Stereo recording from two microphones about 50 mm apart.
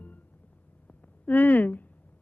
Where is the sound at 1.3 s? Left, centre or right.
Left.